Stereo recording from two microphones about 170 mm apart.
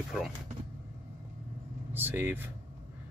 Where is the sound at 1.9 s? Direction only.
10° right (ahead or behind).